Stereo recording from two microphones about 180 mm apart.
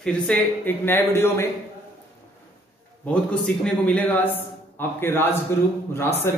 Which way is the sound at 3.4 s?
5° left (ahead or behind).